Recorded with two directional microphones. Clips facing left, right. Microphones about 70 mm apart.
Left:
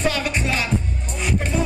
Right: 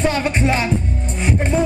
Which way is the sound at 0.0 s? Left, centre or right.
Right.